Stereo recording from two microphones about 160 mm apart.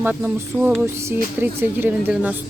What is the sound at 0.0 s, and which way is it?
A woman's voice, 10° right (ahead or behind).